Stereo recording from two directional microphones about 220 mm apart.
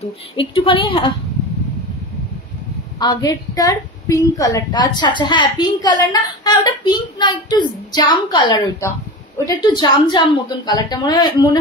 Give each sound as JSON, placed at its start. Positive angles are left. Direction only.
{"t": 0.4, "sound": "a woman's voice", "side_deg": 25}
{"t": 3.0, "sound": "a woman's voice", "side_deg": 20}